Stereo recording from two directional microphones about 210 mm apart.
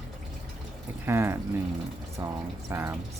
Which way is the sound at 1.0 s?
10° right (ahead or behind).